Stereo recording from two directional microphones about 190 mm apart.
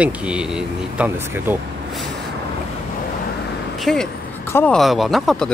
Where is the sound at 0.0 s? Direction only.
5° right (ahead or behind).